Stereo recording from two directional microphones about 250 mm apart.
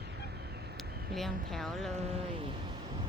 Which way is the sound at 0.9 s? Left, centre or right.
Right.